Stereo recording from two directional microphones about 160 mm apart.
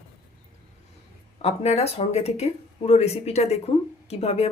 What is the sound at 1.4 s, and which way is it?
Speech, 40° left (ahead or behind).